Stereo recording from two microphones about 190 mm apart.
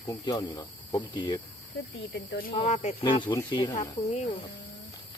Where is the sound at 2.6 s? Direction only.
35° left (ahead or behind).